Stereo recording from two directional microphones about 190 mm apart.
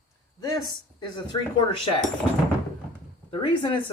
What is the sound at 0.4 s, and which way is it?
Speech, 20° left (ahead or behind).